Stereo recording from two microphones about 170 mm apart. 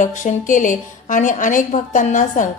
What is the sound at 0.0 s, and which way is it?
A woman's voice, 50° left (ahead or behind).